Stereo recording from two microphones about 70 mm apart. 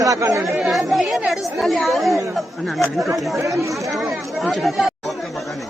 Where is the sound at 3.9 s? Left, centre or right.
Centre.